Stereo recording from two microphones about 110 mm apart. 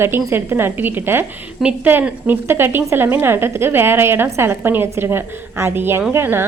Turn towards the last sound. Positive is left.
turn(degrees=-20)  # may be behind; listen again after turning